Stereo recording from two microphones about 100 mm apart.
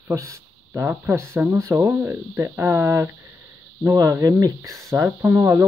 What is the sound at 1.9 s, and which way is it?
Speech, 15° right (ahead or behind).